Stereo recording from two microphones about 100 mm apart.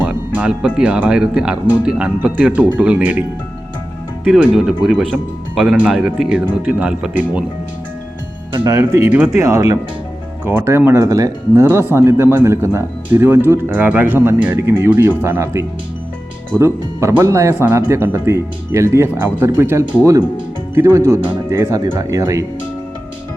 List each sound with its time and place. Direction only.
0.0 s speech: 15° right (ahead or behind)
4.3 s speech: 5° right (ahead or behind)
8.8 s speech: 25° right (ahead or behind)
9.3 s speech: 35° right (ahead or behind)
10.4 s speech: 25° right (ahead or behind)
11.6 s speech: 20° right (ahead or behind)